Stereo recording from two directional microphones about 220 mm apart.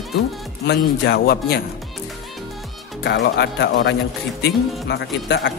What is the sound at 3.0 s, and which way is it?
Speech, 50° left (ahead or behind).